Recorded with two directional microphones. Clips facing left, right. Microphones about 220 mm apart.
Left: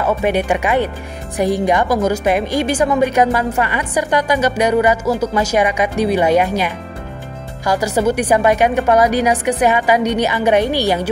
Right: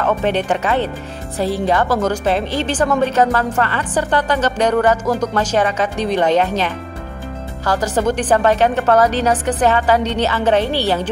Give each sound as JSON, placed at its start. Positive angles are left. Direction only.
{"t": 0.0, "sound": "a woman's voice", "side_deg": 10}